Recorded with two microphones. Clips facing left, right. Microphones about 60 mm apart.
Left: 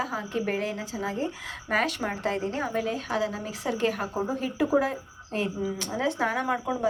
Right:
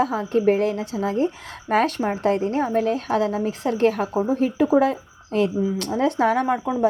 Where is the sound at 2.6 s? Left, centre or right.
Right.